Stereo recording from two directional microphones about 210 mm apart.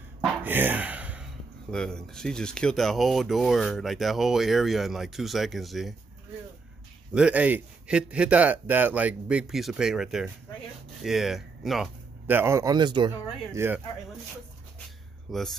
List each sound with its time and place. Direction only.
0.4 s speech: 10° right (ahead or behind)
7.2 s speech: 5° right (ahead or behind); by 13.1 s 20° right (ahead or behind)
13.1 s speech: 10° right (ahead or behind)
15.3 s speech: centre (ahead or behind)